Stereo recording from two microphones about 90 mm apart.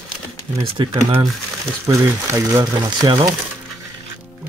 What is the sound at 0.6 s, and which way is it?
Speech, 90° right.